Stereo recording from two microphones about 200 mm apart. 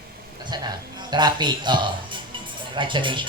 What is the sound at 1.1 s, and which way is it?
Speech, 20° right (ahead or behind).